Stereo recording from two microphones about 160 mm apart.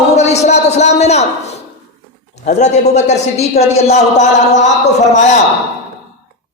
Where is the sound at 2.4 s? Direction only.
45° left (ahead or behind).